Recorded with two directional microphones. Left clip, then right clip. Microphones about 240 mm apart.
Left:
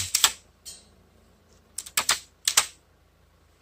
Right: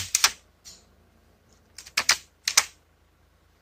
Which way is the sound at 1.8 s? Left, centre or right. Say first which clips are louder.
Right 2 dB; centre.